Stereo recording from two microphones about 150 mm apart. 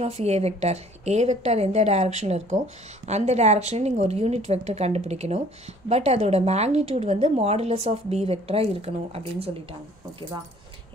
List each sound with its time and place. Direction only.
0.0 s a woman's voice: 45° right (ahead or behind)